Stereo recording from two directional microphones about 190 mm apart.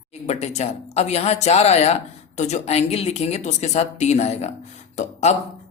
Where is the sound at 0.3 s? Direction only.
35° left (ahead or behind).